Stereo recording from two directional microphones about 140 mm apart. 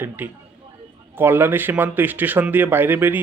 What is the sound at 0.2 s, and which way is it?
Speech, 10° right (ahead or behind).